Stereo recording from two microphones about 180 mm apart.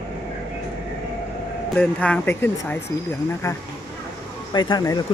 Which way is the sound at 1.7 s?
5° left (ahead or behind).